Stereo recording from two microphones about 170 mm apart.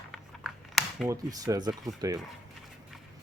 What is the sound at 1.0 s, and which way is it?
Speech, 20° right (ahead or behind).